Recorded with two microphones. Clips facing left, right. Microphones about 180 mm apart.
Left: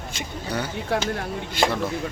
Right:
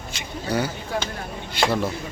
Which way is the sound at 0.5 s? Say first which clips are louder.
Right 5 dB; 5° right (ahead or behind).